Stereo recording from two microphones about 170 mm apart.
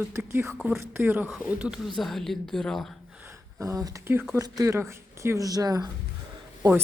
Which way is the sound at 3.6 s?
20° right (ahead or behind).